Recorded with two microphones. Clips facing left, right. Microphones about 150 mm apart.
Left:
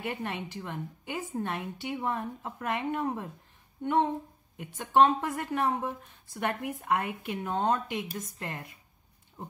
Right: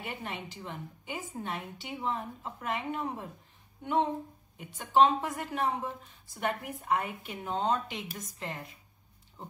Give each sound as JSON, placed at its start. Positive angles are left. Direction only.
{"t": 0.0, "sound": "a woman's voice", "side_deg": 60}
{"t": 4.6, "sound": "a woman's voice", "side_deg": 55}